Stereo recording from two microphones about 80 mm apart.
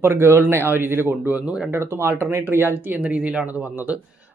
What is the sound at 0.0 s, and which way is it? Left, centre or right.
Speech, right.